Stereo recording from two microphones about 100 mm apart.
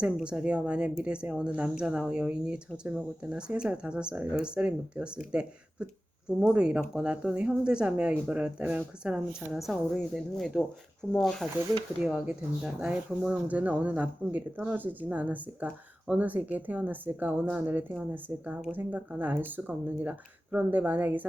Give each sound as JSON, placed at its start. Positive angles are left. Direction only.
{"t": 0.0, "sound": "speech", "side_deg": -10}
{"t": 12.0, "sound": "speech", "side_deg": -10}